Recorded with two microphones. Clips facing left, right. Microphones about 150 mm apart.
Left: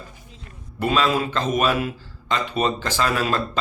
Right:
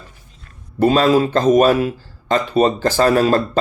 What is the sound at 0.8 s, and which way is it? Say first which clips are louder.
Speech: right 8 dB; 35° right (ahead or behind).